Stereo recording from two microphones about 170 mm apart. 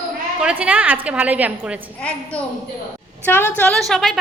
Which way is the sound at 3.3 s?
10° left (ahead or behind).